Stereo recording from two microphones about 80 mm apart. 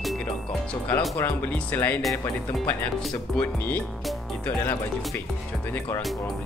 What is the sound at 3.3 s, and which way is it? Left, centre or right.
Speech, left.